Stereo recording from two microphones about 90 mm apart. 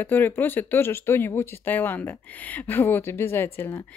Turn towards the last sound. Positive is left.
turn(degrees=25)  # may be behind; listen again after turning